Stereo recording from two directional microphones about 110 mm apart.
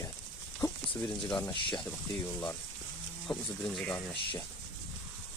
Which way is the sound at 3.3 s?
10° left (ahead or behind).